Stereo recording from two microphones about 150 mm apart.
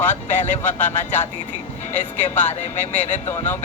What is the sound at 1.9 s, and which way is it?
Speech, 55° left (ahead or behind).